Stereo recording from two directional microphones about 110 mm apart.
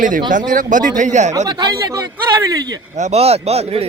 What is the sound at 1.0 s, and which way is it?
Speech, 90° right.